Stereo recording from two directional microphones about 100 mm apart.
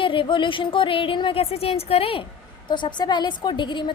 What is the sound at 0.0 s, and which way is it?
A woman's voice, 60° left (ahead or behind).